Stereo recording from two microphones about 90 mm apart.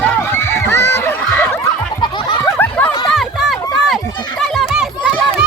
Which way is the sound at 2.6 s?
20° left (ahead or behind).